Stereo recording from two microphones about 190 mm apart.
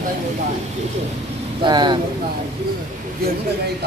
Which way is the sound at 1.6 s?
20° right (ahead or behind).